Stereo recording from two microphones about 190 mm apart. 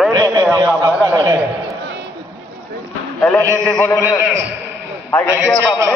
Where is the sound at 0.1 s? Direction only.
20° right (ahead or behind).